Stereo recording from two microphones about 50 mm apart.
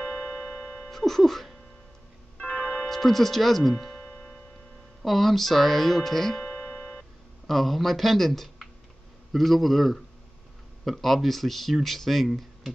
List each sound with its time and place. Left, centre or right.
0.0 s music: centre
2.3 s music: left
2.9 s tick-tock: centre
5.0 s speech: centre